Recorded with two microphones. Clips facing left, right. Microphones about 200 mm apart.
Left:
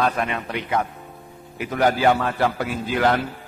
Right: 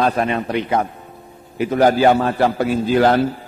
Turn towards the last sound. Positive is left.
turn(degrees=-35)  # may be behind; listen again after turning